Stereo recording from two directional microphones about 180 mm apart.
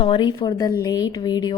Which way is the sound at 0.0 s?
25° left (ahead or behind).